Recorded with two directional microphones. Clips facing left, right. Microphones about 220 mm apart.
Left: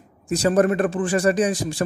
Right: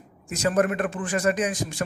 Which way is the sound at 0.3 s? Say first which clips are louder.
Left 5 dB; 35° left (ahead or behind).